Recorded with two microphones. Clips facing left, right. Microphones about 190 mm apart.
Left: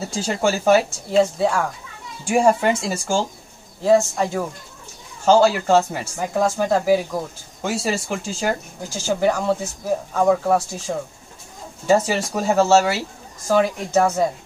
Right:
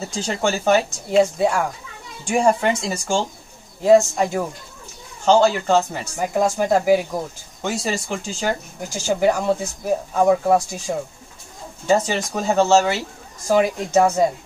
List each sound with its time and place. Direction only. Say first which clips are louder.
0.1 s speech: left 2 dB; 5° left (ahead or behind)
1.1 s speech: right 1 dB; 15° right (ahead or behind)
2.2 s speech: left 1 dB; 5° left (ahead or behind)
3.8 s speech: right 2 dB; 15° right (ahead or behind)
5.2 s speech: left 1 dB; 5° left (ahead or behind)
6.3 s speech: right 1 dB; 15° right (ahead or behind)
7.6 s speech: left 1 dB; 5° left (ahead or behind)
8.8 s speech: right 1 dB; 15° right (ahead or behind)
11.9 s speech: left 1 dB; 5° left (ahead or behind)
13.5 s speech: right 1 dB; 15° right (ahead or behind)